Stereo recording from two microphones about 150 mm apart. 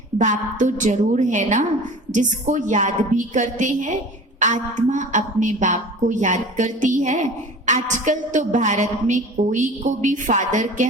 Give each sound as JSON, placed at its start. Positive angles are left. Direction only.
{"t": 0.2, "sound": "a woman's voice", "side_deg": -55}